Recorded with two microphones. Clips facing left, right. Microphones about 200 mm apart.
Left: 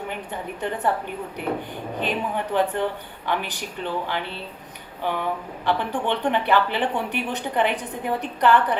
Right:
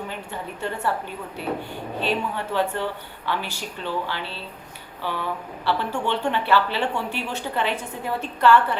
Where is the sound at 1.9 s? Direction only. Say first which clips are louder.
Even; 15° left (ahead or behind).